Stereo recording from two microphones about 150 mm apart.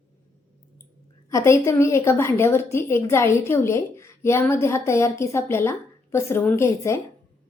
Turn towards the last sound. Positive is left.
turn(degrees=20)  # may be behind; listen again after turning